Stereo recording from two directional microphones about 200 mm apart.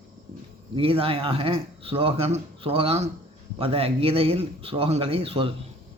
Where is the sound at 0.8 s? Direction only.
30° right (ahead or behind).